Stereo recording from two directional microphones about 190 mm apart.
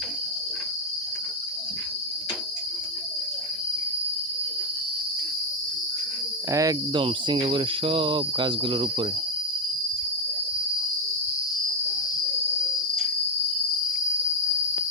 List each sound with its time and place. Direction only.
6.5 s speech: 20° right (ahead or behind)